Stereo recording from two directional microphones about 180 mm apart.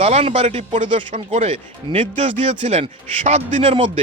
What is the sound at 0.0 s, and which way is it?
Speech, 35° right (ahead or behind).